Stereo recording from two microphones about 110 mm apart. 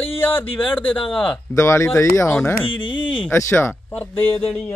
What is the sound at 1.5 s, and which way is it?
Speech, 25° left (ahead or behind).